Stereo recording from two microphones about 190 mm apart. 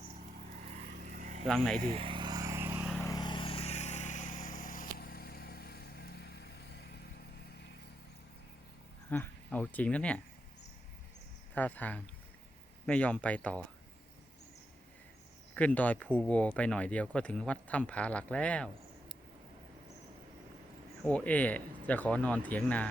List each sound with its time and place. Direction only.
0.7 s vehicle: 45° right (ahead or behind)
1.5 s speech: 5° left (ahead or behind)
1.8 s vehicle: 30° right (ahead or behind); by 2.9 s 10° right (ahead or behind)
3.0 s vehicle: 20° left (ahead or behind); by 6.5 s 60° left (ahead or behind)
9.0 s speech: 10° left (ahead or behind)
11.5 s speech: 10° left (ahead or behind)
15.5 s speech: 10° left (ahead or behind)
21.0 s speech: 5° left (ahead or behind)